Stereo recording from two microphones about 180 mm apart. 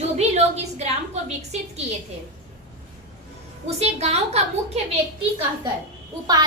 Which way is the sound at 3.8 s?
35° right (ahead or behind).